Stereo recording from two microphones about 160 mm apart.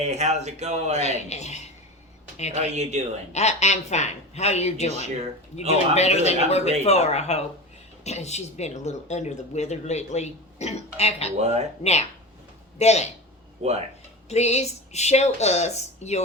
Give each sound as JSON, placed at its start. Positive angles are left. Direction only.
{"t": 0.0, "sound": "speech", "side_deg": -45}
{"t": 0.9, "sound": "speech", "side_deg": 45}
{"t": 2.6, "sound": "speech", "side_deg": -45}
{"t": 3.3, "sound": "speech", "side_deg": 45}
{"t": 11.3, "sound": "speech", "side_deg": -45}
{"t": 11.8, "sound": "speech", "side_deg": 45}
{"t": 13.6, "sound": "speech", "side_deg": -40}
{"t": 14.3, "sound": "speech", "side_deg": 45}